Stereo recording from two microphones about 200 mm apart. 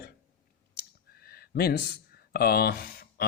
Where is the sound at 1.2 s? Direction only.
50° left (ahead or behind).